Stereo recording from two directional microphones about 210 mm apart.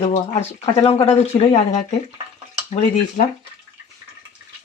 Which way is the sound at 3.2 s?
40° left (ahead or behind).